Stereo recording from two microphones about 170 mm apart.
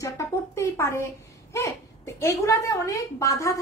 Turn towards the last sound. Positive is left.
turn(degrees=20)  # may be behind; listen again after turning